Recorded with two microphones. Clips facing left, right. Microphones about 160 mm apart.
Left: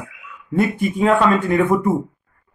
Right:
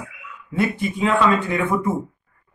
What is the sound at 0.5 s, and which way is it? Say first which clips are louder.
Speech: left 3 dB; 50° left (ahead or behind).